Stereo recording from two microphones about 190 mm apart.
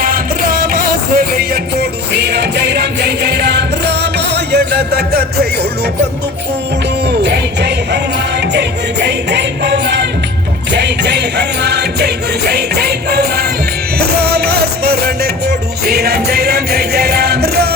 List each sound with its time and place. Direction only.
0.0 s music: 50° right (ahead or behind)
7.2 s music: 60° right (ahead or behind)